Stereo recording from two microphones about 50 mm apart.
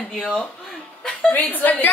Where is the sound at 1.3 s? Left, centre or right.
Left.